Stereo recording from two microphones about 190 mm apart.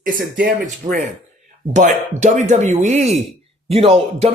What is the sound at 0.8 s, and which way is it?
Speech, 25° right (ahead or behind).